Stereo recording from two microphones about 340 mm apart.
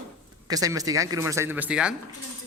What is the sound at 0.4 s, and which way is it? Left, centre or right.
A man's voice, centre.